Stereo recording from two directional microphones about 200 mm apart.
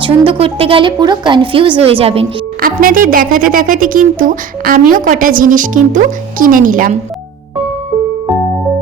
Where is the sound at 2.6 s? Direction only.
45° right (ahead or behind).